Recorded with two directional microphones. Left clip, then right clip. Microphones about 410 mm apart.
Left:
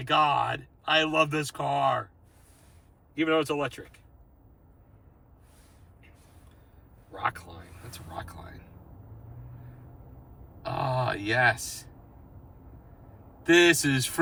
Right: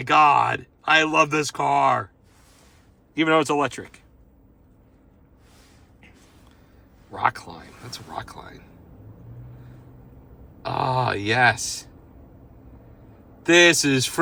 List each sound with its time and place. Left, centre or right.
0.0 s speech: centre
3.2 s speech: centre
7.1 s speech: centre
10.6 s speech: centre
13.4 s speech: centre